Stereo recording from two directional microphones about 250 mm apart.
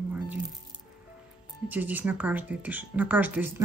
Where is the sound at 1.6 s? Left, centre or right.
Centre.